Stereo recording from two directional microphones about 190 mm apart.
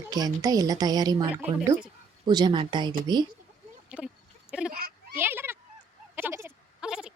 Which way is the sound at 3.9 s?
5° right (ahead or behind).